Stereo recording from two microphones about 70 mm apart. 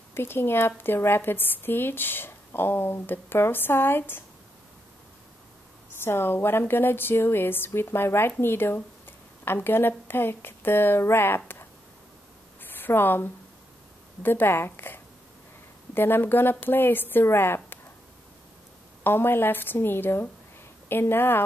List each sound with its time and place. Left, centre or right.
0.1 s a woman's voice: left
5.9 s a woman's voice: left
12.6 s a sound: left
14.2 s a woman's voice: left
19.0 s a woman's voice: left